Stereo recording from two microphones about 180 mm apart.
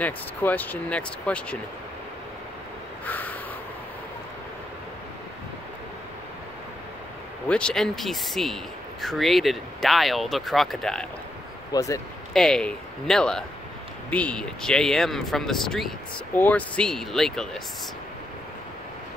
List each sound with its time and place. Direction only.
0.0 s speech: 10° left (ahead or behind)
3.1 s crow: 10° left (ahead or behind)
7.4 s speech: 5° left (ahead or behind)
11.7 s speech: 20° left (ahead or behind)
12.4 s speech: 5° left (ahead or behind)